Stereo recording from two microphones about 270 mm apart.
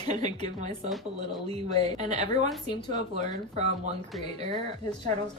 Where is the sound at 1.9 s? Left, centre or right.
Right.